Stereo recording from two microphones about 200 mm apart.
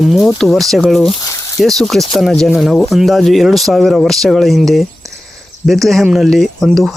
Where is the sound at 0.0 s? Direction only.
Centre (ahead or behind).